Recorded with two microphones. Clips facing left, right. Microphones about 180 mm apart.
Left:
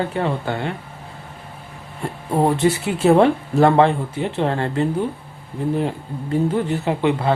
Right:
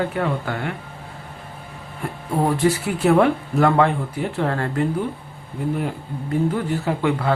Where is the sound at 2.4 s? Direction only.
25° left (ahead or behind).